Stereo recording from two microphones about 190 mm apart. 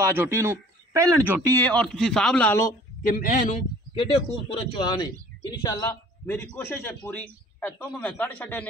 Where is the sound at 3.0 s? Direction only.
45° left (ahead or behind).